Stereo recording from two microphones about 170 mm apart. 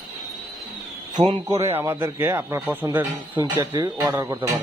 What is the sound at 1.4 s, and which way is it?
A man's voice, 15° right (ahead or behind).